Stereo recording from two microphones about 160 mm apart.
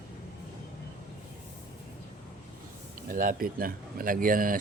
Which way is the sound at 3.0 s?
60° right (ahead or behind).